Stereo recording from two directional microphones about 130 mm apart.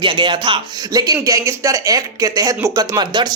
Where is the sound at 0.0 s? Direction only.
40° right (ahead or behind).